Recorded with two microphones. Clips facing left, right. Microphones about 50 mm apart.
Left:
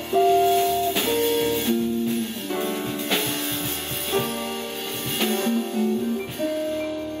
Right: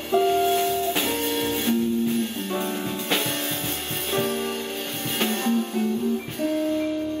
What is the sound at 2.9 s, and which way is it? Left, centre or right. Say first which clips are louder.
Music: even; right.